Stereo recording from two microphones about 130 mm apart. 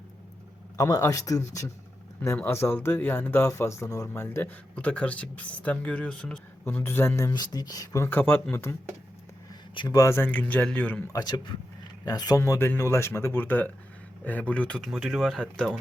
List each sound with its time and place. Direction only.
0.8 s speech: 25° left (ahead or behind)
9.7 s speech: 35° left (ahead or behind)
10.0 s speech: 20° left (ahead or behind)
11.1 s speech: 30° left (ahead or behind); by 14.8 s 10° left (ahead or behind)
14.8 s speech: 5° right (ahead or behind)